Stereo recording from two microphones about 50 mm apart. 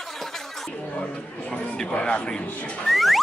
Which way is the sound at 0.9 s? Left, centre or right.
Left.